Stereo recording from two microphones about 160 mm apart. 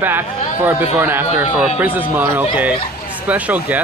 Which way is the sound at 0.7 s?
10° right (ahead or behind).